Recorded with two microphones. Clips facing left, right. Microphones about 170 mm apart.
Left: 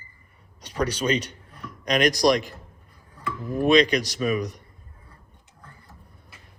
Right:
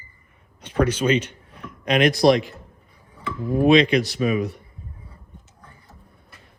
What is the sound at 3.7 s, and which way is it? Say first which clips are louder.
Speech: even; 40° left (ahead or behind).